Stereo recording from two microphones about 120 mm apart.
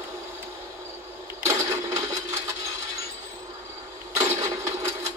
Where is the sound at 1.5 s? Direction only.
30° right (ahead or behind).